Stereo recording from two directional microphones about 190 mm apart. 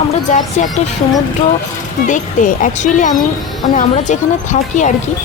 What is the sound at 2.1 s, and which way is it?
Speech, 40° left (ahead or behind).